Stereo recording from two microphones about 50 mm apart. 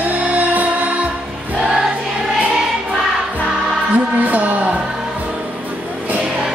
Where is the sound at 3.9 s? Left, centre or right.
Right.